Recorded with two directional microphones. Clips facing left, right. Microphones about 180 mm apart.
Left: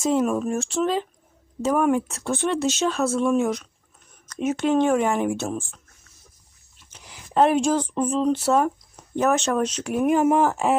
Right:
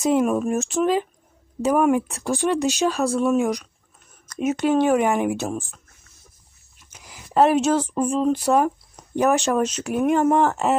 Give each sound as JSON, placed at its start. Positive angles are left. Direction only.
{"t": 0.0, "sound": "speech", "side_deg": -15}
{"t": 2.2, "sound": "speech", "side_deg": 0}
{"t": 2.5, "sound": "speech", "side_deg": -15}
{"t": 6.7, "sound": "speech", "side_deg": -10}